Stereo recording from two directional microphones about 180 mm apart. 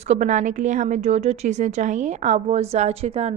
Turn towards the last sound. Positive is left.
turn(degrees=-35)  # may be behind; listen again after turning